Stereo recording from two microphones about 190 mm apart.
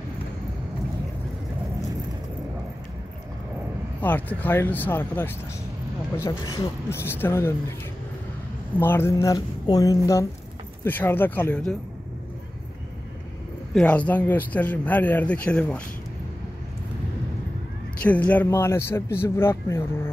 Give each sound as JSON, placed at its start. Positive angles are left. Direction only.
{"t": 4.0, "sound": "speech", "side_deg": 10}
{"t": 8.7, "sound": "speech", "side_deg": 10}
{"t": 13.7, "sound": "speech", "side_deg": 5}
{"t": 18.0, "sound": "speech", "side_deg": 10}